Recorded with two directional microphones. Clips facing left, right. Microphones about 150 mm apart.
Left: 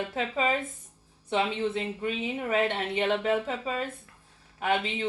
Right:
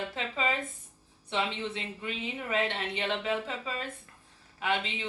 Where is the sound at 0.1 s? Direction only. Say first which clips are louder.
Left 4 dB; 45° left (ahead or behind).